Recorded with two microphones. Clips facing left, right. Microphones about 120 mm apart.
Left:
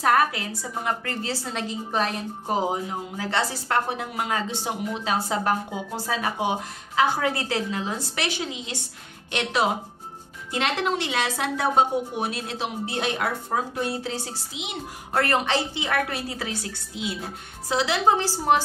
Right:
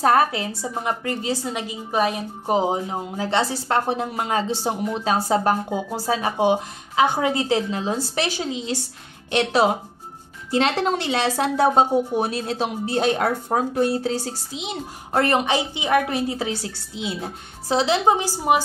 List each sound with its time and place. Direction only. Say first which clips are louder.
0.0 s a woman's voice: right 3 dB; 30° right (ahead or behind)
15.2 s a woman's voice: right 3 dB; 15° right (ahead or behind)